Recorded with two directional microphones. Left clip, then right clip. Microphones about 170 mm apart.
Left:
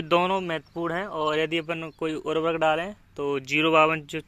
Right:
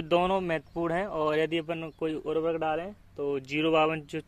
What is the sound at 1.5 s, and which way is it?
Speech, centre (ahead or behind).